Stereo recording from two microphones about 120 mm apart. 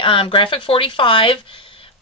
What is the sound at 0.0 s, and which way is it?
Speech, 45° left (ahead or behind).